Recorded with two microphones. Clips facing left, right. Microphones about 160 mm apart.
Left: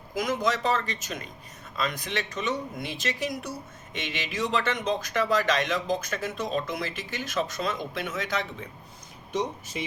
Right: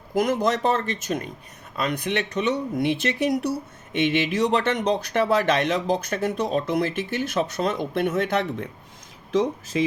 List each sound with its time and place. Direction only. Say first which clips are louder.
0.1 s speech: right 5 dB; 60° right (ahead or behind)